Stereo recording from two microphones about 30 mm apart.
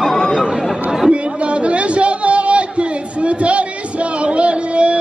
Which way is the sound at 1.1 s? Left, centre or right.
Right.